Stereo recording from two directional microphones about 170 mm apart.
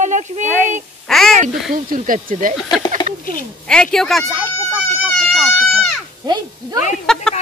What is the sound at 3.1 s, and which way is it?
Speech, 45° right (ahead or behind).